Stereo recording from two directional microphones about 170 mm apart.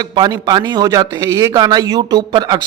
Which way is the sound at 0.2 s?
25° right (ahead or behind).